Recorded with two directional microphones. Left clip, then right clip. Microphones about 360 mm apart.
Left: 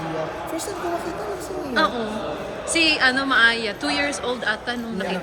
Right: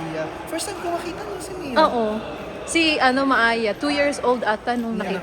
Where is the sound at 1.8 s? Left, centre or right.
Centre.